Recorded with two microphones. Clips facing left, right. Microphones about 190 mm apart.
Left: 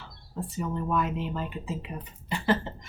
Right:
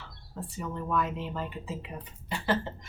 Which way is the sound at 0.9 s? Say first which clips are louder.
Even; 15° left (ahead or behind).